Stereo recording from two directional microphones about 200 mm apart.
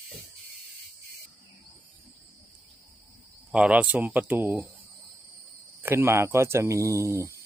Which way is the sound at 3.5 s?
5° right (ahead or behind).